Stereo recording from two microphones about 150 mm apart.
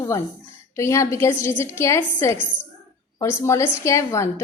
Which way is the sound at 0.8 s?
20° left (ahead or behind).